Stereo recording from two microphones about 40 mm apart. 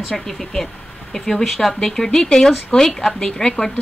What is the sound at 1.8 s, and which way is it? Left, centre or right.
Speech, centre.